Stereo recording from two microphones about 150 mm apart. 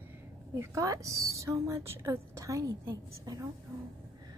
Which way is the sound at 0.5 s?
20° right (ahead or behind).